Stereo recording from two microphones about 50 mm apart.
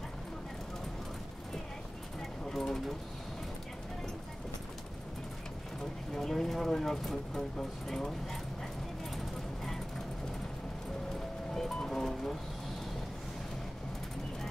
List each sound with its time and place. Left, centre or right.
2.5 s speech: centre
6.1 s speech: centre
11.5 s music: centre